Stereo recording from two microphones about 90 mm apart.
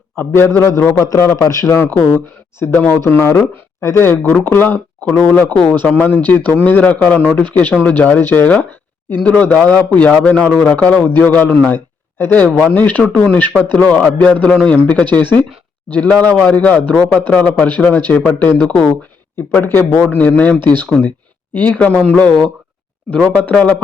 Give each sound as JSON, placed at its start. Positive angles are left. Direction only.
{"t": 0.2, "sound": "a man's voice", "side_deg": 25}
{"t": 1.7, "sound": "a man's voice", "side_deg": 25}